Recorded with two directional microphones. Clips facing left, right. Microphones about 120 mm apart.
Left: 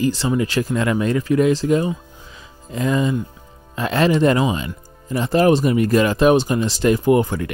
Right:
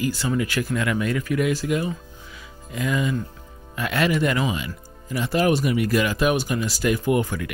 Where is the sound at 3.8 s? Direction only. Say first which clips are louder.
Left 5 dB; 35° left (ahead or behind).